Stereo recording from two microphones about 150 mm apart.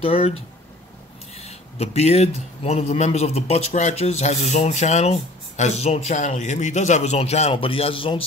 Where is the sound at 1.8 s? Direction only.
45° left (ahead or behind).